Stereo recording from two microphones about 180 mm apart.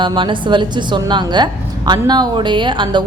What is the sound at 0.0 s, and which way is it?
A woman's voice, 25° right (ahead or behind).